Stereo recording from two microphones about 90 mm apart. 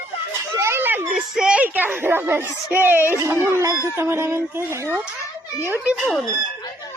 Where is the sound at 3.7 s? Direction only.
30° left (ahead or behind).